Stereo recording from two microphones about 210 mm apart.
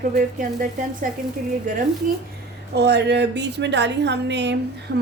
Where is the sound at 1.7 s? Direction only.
40° right (ahead or behind).